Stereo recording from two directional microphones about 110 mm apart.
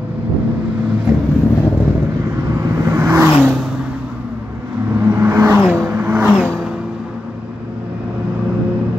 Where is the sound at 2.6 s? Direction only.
25° right (ahead or behind).